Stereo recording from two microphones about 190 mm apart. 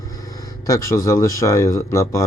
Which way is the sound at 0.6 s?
15° left (ahead or behind).